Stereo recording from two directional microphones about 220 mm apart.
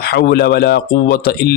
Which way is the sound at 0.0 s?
45° left (ahead or behind).